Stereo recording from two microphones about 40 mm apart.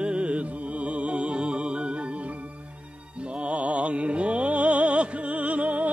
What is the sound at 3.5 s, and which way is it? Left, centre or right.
Music, right.